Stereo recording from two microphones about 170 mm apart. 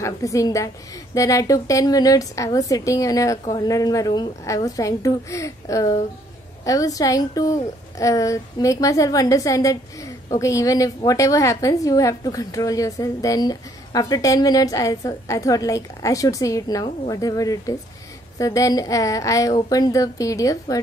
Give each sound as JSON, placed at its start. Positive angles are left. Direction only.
{"t": 0.0, "sound": "a woman's voice", "side_deg": 20}